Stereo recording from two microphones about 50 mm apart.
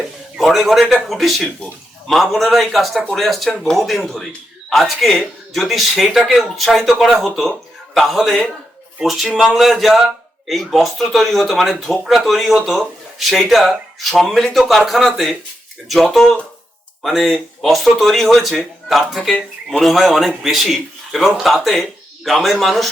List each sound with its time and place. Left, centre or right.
0.3 s speech: centre
3.8 s speech: centre